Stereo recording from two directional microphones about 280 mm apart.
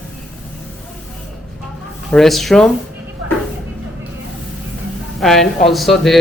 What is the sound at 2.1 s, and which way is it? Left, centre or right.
Speech, centre.